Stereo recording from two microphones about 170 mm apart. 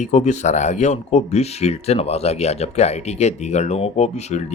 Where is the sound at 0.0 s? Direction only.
45° left (ahead or behind).